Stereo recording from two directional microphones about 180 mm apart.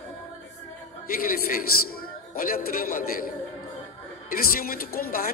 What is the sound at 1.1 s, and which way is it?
A man's voice, 55° left (ahead or behind).